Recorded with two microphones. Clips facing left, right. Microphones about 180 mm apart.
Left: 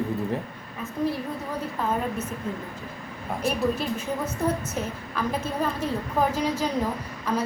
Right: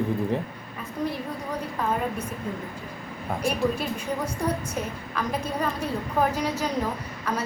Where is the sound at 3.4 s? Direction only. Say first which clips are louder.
Left 1 dB; centre (ahead or behind).